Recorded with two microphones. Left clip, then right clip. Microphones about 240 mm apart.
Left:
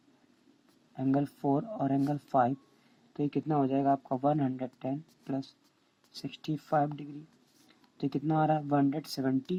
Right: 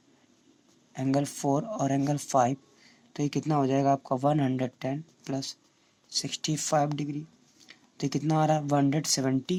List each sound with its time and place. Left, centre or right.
0.9 s speech: right